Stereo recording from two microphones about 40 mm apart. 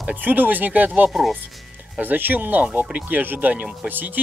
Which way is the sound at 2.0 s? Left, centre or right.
Right.